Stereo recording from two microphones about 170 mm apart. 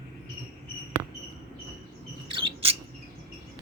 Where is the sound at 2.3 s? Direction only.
30° right (ahead or behind).